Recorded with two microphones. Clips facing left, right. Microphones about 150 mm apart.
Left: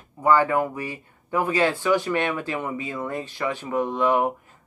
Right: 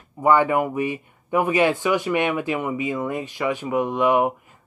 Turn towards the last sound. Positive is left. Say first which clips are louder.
# right 2 dB
turn(degrees=-15)  # may be behind; listen again after turning